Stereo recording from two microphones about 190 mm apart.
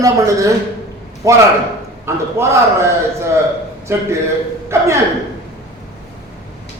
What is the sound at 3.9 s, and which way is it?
Speech, 15° right (ahead or behind).